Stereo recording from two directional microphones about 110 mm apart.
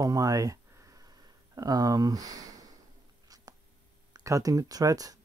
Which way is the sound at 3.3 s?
35° right (ahead or behind).